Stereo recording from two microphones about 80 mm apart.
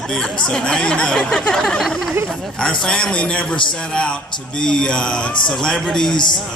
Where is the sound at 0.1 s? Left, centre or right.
Centre.